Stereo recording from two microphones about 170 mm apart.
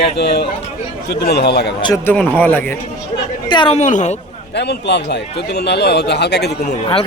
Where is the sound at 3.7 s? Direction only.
45° left (ahead or behind).